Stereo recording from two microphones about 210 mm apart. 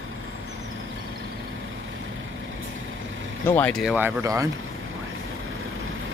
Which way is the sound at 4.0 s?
10° right (ahead or behind).